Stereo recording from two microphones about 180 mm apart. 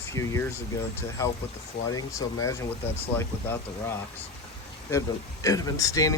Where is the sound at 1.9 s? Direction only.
20° left (ahead or behind).